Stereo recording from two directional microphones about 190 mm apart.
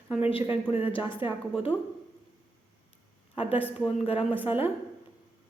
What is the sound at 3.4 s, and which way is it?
Speech, 30° left (ahead or behind).